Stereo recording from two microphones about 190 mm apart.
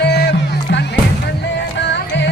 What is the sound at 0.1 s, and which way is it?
Music, 60° left (ahead or behind).